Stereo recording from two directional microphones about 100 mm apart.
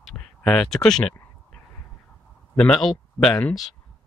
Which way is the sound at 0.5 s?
5° left (ahead or behind).